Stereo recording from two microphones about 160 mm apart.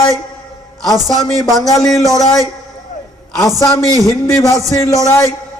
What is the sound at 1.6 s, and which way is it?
Speech, 20° left (ahead or behind).